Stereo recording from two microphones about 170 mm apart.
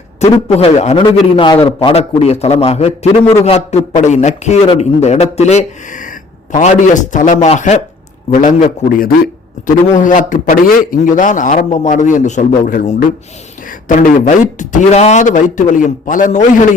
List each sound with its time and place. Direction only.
0.2 s a man's voice: 40° left (ahead or behind)